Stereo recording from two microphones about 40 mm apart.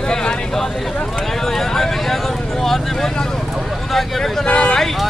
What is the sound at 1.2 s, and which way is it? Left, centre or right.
Speech, centre.